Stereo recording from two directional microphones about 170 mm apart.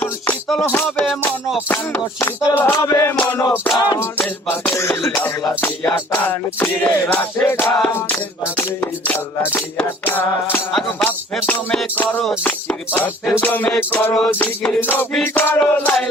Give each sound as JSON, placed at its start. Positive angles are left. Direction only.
{"t": 0.0, "sound": "music", "side_deg": 5}
{"t": 3.8, "sound": "music", "side_deg": 25}
{"t": 4.0, "sound": "music", "side_deg": 15}